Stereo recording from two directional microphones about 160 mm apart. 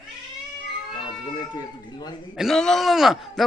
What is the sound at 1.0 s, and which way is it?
Cat, 25° left (ahead or behind).